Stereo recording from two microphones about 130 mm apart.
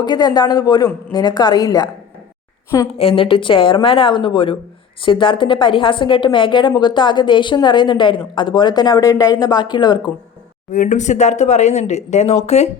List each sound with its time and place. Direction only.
0.0 s a woman's voice: 35° left (ahead or behind)
3.0 s a woman's voice: 45° left (ahead or behind)
10.7 s speech: 70° left (ahead or behind)